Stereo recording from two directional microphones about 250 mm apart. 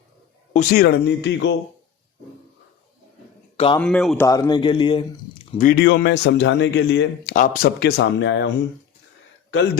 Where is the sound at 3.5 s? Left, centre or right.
Left.